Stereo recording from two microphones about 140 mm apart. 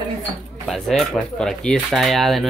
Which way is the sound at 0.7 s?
Centre (ahead or behind).